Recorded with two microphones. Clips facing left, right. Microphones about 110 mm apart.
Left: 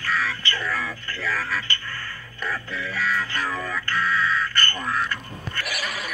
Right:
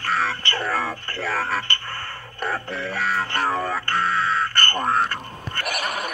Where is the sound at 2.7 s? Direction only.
60° right (ahead or behind).